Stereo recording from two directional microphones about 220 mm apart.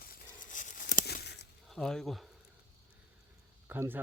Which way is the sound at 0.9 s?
45° left (ahead or behind).